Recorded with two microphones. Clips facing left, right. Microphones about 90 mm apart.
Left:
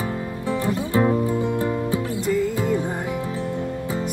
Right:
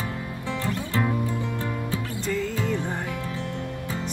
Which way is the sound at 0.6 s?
20° left (ahead or behind).